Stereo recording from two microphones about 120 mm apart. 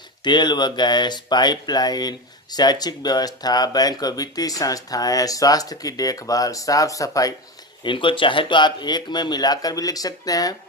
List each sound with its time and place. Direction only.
0.3 s speech: 40° left (ahead or behind)
7.9 s speech: 45° left (ahead or behind)